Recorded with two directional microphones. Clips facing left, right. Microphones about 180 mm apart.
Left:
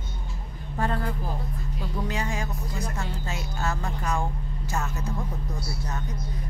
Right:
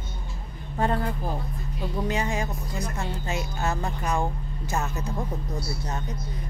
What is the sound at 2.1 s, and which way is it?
A woman's voice, 20° right (ahead or behind).